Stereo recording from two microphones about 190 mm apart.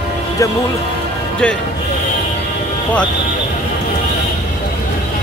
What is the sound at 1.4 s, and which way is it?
Speech, 5° left (ahead or behind).